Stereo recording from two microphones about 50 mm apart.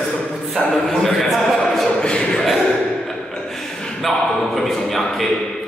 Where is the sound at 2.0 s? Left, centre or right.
Centre.